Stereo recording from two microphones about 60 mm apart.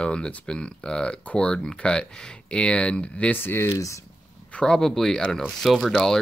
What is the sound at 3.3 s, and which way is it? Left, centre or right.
Speech, left.